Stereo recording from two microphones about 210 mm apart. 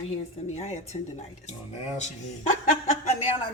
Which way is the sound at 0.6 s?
30° left (ahead or behind).